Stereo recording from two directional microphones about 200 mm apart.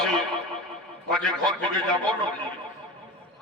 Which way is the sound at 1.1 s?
Centre (ahead or behind).